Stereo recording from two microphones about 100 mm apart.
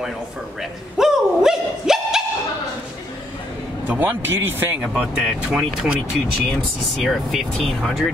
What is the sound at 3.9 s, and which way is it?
Speech, 15° right (ahead or behind).